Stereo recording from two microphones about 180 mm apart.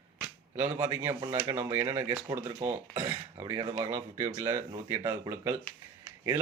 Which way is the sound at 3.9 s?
15° right (ahead or behind).